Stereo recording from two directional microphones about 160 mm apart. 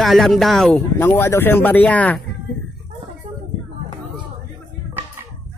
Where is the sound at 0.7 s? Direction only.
15° left (ahead or behind).